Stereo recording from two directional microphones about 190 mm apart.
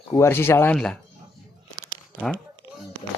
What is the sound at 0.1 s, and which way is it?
Speech, 15° left (ahead or behind).